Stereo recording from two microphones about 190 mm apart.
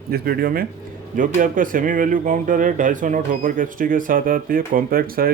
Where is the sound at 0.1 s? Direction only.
50° right (ahead or behind).